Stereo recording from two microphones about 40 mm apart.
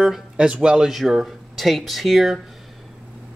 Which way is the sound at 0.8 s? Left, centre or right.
Centre.